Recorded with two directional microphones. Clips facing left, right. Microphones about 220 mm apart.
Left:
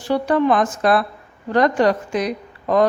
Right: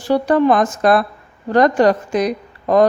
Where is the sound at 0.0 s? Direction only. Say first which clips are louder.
Right 3 dB; 40° right (ahead or behind).